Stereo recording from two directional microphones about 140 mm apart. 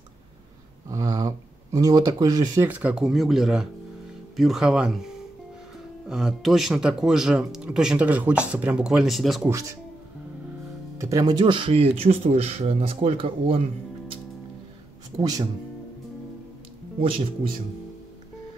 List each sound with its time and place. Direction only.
0.8 s a sound: 25° right (ahead or behind)
2.6 s speech: 10° right (ahead or behind)
9.4 s speech: 20° right (ahead or behind)
11.0 s speech: 25° right (ahead or behind); by 13.6 s 40° right (ahead or behind)
15.1 s speech: 25° right (ahead or behind)